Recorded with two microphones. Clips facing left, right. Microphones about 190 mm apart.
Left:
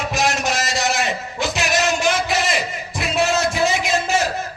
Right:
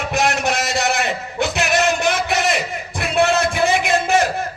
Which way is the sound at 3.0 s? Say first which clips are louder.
Right 2 dB; 60° right (ahead or behind).